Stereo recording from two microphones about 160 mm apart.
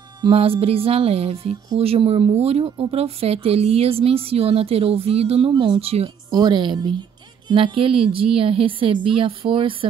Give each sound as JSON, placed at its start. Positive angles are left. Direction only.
{"t": 0.2, "sound": "speech", "side_deg": -35}
{"t": 6.3, "sound": "a woman's voice", "side_deg": -25}